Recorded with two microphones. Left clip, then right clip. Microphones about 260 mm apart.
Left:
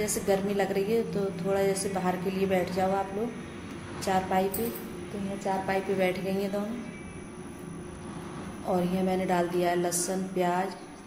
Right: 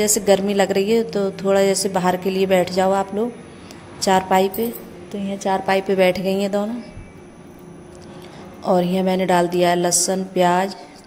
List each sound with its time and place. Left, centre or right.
0.0 s a woman's voice: right
8.6 s a woman's voice: right